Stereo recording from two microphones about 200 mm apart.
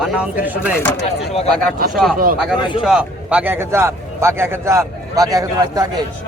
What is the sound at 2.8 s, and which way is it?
Speech, 5° right (ahead or behind).